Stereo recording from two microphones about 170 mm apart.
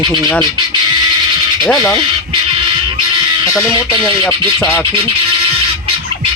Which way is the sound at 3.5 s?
15° left (ahead or behind).